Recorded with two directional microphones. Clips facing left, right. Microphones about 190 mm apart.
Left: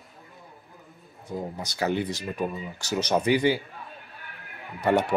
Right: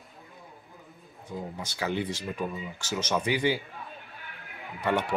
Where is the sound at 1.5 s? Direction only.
45° left (ahead or behind).